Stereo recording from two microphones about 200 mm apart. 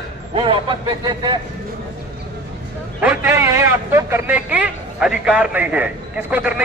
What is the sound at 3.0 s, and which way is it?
A man's voice, 10° right (ahead or behind).